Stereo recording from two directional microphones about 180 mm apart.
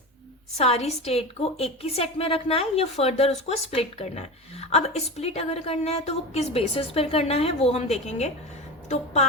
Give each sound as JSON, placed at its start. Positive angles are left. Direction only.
{"t": 0.5, "sound": "a woman's voice", "side_deg": 35}